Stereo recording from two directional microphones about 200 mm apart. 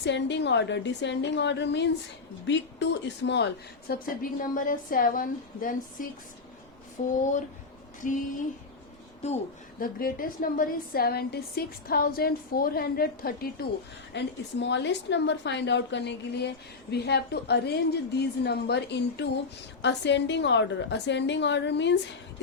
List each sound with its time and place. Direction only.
0.0 s a woman's voice: 60° left (ahead or behind); by 8.2 s 40° left (ahead or behind)
9.2 s speech: 35° left (ahead or behind)
9.8 s a woman's voice: 45° left (ahead or behind)
14.1 s a woman's voice: 60° left (ahead or behind)